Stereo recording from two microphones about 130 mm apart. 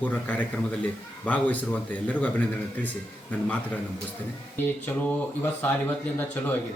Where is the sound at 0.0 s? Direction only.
10° left (ahead or behind).